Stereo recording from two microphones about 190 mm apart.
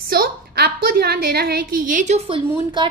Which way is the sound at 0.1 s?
55° right (ahead or behind).